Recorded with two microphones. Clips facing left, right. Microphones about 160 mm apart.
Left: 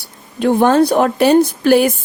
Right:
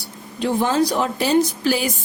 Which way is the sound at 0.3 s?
55° left (ahead or behind).